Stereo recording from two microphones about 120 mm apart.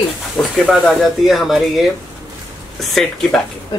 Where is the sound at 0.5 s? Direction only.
Centre (ahead or behind).